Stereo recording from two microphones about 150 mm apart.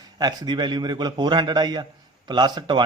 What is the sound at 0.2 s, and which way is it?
A man's voice, 30° right (ahead or behind).